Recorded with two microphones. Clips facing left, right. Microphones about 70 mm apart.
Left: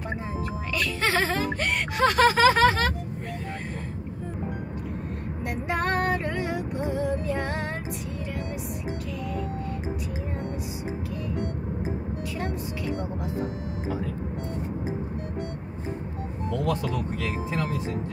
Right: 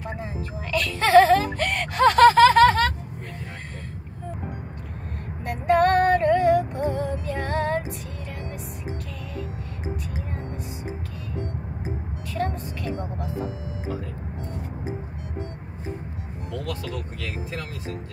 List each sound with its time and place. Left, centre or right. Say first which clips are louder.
0.7 s whimper: right 10 dB; centre
5.5 s female singing: right 8 dB; centre
17.2 s vehicle: left 4 dB; left